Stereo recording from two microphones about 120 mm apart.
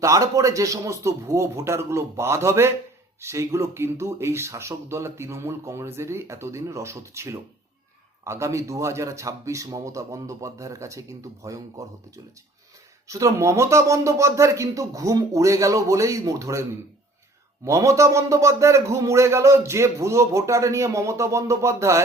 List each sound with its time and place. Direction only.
0.0 s speech: 25° right (ahead or behind)
17.7 s speech: 25° right (ahead or behind)